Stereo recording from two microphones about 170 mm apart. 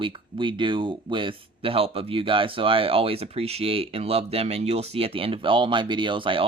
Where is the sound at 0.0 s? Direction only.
30° right (ahead or behind).